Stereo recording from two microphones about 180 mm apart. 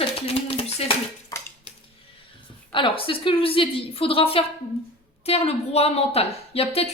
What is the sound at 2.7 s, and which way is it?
Speech, 30° left (ahead or behind).